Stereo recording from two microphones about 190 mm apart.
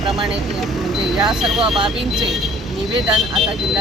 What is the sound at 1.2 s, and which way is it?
Speech, centre (ahead or behind).